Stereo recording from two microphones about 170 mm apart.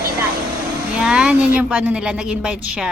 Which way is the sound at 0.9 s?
5° right (ahead or behind).